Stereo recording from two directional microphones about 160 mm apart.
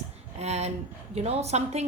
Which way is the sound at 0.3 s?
45° right (ahead or behind).